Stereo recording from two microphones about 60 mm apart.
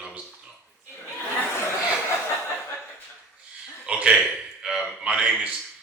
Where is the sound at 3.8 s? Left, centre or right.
Centre.